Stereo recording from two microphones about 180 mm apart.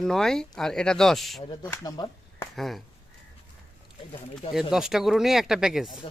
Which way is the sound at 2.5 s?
Centre (ahead or behind).